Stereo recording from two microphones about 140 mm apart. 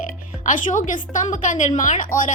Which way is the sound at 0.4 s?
65° left (ahead or behind).